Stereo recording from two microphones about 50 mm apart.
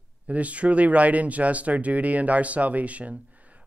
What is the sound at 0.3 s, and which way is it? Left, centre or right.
Speech, right.